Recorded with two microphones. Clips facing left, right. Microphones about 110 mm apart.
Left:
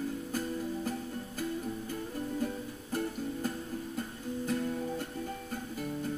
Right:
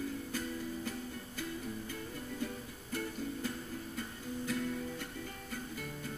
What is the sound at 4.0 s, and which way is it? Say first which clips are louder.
Music: left 3 dB; 45° left (ahead or behind).